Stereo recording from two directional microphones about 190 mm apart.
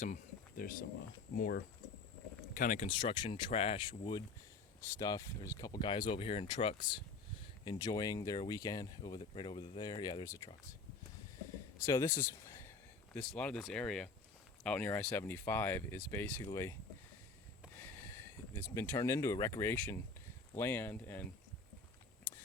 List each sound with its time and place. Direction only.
0.0 s speech: 45° left (ahead or behind)
2.6 s speech: 45° left (ahead or behind)
2.8 s speech: 25° left (ahead or behind)
11.9 s speech: 15° left (ahead or behind)
17.7 s a sound: 10° left (ahead or behind)
18.5 s speech: 15° left (ahead or behind)